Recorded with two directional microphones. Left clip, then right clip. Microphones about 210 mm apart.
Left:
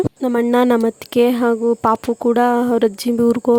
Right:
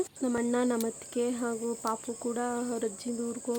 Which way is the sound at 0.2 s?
40° left (ahead or behind).